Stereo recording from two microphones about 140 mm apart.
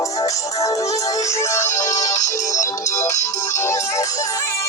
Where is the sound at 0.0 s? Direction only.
25° left (ahead or behind).